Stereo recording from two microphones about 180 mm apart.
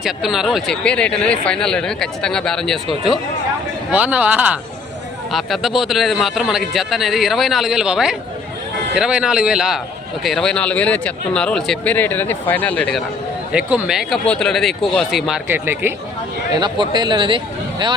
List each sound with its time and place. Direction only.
0.0 s speech: centre (ahead or behind)
13.5 s speech: 5° right (ahead or behind)
15.4 s speech: 10° right (ahead or behind)
16.6 s speech: 25° right (ahead or behind)